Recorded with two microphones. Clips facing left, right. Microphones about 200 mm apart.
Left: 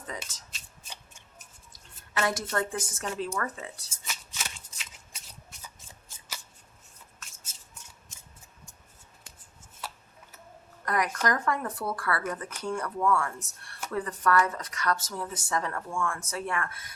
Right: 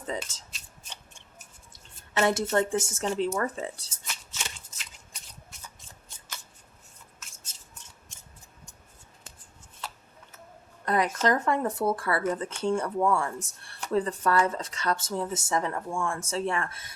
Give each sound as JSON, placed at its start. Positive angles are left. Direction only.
{"t": 0.0, "sound": "shuffling cards", "side_deg": -25}
{"t": 0.5, "sound": "shuffling cards", "side_deg": 5}
{"t": 1.7, "sound": "speech", "side_deg": -25}
{"t": 3.8, "sound": "shuffling cards", "side_deg": 5}
{"t": 7.5, "sound": "a sound", "side_deg": 10}
{"t": 10.8, "sound": "speech", "side_deg": -25}